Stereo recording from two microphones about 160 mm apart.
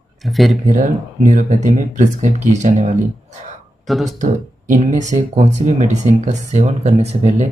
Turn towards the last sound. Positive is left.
turn(degrees=-45)  # may be behind; listen again after turning